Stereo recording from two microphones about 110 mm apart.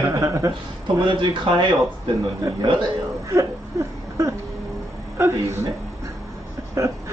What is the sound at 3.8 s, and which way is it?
Speech, 25° right (ahead or behind).